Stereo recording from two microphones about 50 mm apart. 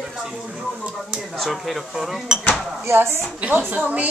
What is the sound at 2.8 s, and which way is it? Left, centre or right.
Speech, right.